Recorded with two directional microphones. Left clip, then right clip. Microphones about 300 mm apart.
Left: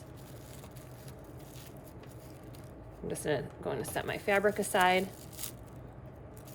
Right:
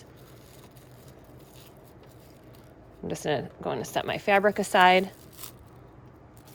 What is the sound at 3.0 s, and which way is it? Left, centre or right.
A woman's voice, right.